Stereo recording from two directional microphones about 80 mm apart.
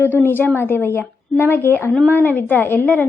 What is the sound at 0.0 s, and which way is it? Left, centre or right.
A woman's voice, left.